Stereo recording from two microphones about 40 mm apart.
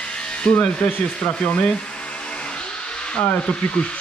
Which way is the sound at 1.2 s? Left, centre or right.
Left.